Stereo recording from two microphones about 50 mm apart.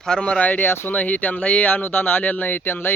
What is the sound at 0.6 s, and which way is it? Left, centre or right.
Speech, left.